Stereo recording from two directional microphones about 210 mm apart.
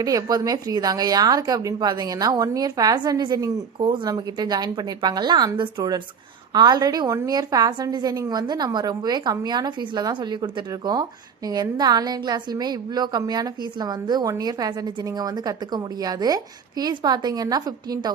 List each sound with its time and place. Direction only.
0.0 s a woman's voice: 15° right (ahead or behind)